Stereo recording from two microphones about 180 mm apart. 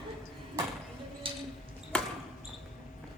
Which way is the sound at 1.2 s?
30° right (ahead or behind).